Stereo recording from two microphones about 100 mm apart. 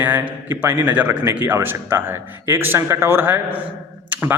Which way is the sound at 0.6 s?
20° right (ahead or behind).